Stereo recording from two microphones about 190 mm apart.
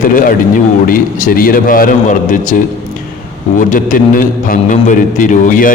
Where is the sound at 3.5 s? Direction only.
45° left (ahead or behind).